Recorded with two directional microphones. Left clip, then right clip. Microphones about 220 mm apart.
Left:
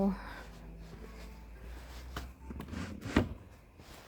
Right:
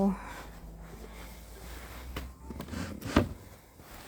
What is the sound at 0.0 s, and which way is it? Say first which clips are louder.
Gasp: right 3 dB; 10° right (ahead or behind).